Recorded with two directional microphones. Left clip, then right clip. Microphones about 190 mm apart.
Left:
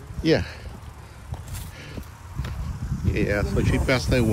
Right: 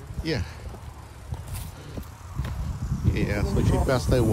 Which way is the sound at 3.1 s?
5° right (ahead or behind).